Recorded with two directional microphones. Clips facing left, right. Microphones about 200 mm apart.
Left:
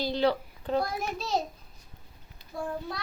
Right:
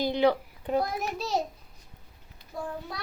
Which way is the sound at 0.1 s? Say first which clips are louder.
Right 2 dB; 15° right (ahead or behind).